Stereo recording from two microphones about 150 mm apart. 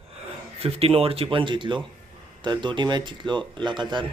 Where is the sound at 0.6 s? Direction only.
40° right (ahead or behind).